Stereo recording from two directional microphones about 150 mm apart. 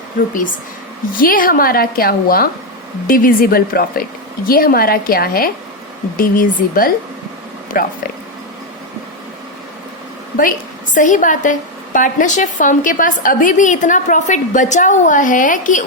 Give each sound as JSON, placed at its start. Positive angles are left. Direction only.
{"t": 1.1, "sound": "a woman's voice", "side_deg": 70}
{"t": 10.9, "sound": "a woman's voice", "side_deg": 60}